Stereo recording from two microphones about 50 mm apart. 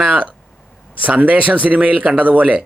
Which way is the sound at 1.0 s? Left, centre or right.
Right.